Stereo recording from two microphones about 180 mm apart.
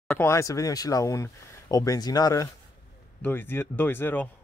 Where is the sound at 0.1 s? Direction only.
15° left (ahead or behind).